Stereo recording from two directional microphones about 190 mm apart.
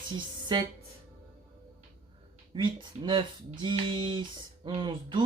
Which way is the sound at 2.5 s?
25° right (ahead or behind).